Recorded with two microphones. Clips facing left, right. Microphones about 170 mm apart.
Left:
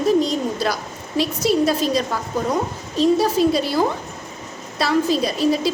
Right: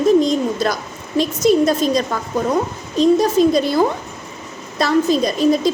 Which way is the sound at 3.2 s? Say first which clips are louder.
Right 3 dB; 10° left (ahead or behind).